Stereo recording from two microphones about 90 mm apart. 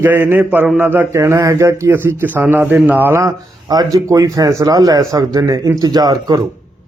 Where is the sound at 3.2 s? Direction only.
45° right (ahead or behind).